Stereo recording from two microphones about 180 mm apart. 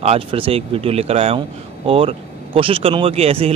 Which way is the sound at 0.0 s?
30° right (ahead or behind).